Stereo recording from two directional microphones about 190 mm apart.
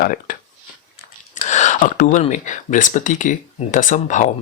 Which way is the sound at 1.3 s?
40° left (ahead or behind).